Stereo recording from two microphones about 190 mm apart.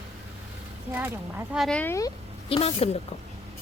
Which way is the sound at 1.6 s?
5° left (ahead or behind).